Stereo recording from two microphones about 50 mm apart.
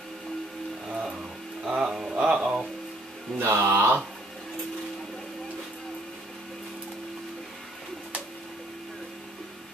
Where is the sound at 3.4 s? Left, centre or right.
Right.